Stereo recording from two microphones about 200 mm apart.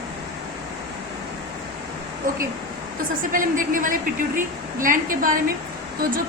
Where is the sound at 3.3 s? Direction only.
40° right (ahead or behind).